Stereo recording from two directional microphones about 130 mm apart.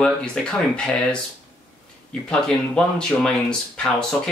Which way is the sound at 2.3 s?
5° left (ahead or behind).